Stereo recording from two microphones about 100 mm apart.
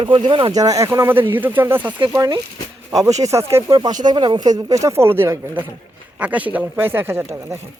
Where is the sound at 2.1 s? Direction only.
35° right (ahead or behind).